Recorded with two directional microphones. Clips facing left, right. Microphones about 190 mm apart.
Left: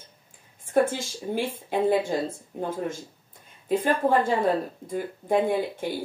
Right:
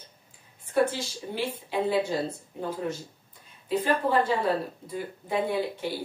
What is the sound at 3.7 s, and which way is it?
Speech, 50° left (ahead or behind).